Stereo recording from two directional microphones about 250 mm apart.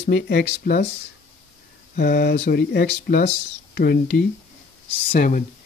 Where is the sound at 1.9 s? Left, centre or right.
Left.